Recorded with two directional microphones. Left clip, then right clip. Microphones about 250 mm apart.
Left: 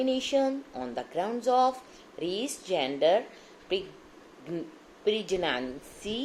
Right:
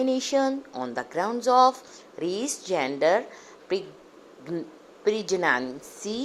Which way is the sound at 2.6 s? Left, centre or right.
Centre.